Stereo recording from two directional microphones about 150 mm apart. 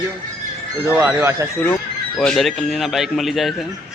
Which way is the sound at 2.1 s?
Centre (ahead or behind).